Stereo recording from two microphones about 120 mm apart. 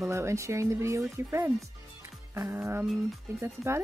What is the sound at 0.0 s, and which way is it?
Speech, 25° right (ahead or behind).